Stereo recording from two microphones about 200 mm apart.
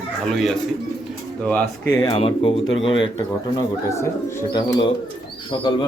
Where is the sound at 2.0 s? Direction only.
25° left (ahead or behind).